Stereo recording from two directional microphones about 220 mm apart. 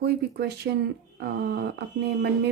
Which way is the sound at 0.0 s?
45° right (ahead or behind).